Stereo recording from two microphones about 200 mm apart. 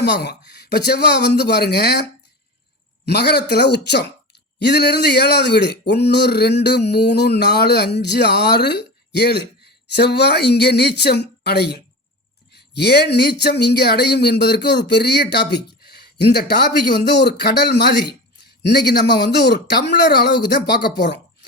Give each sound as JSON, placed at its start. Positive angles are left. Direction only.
{"t": 0.0, "sound": "speech", "side_deg": 55}
{"t": 3.1, "sound": "speech", "side_deg": 55}